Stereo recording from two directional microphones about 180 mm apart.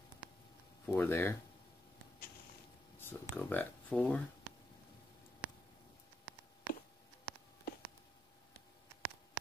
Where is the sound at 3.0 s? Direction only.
10° left (ahead or behind).